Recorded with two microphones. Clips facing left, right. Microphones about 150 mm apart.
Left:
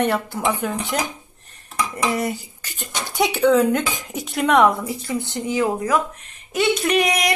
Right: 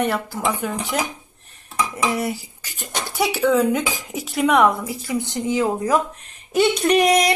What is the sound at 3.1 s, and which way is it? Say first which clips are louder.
Speech: left 2 dB; centre (ahead or behind).